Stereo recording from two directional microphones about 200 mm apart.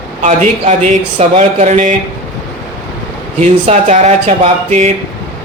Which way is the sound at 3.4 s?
35° right (ahead or behind).